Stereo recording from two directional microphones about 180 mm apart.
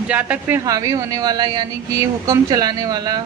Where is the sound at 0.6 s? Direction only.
20° right (ahead or behind).